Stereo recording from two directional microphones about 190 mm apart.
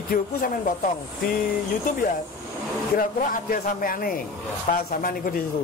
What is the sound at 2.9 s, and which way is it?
A man's voice, 45° left (ahead or behind).